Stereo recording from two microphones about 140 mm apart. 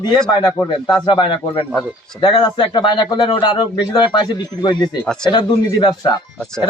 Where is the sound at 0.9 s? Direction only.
35° left (ahead or behind).